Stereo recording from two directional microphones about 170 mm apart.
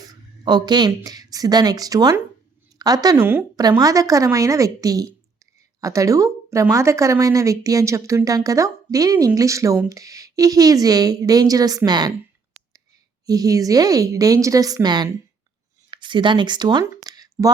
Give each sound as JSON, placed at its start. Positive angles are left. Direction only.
{"t": 0.0, "sound": "a woman's voice", "side_deg": -25}
{"t": 13.2, "sound": "speech", "side_deg": -20}
{"t": 16.8, "sound": "a sound", "side_deg": -20}